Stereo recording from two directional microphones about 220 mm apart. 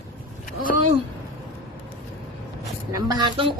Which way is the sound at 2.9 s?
15° right (ahead or behind).